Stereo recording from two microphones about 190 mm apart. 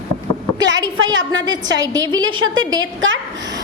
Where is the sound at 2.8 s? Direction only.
90° right.